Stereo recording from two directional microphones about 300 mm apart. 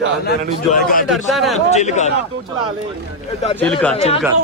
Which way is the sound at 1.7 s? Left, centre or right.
Left.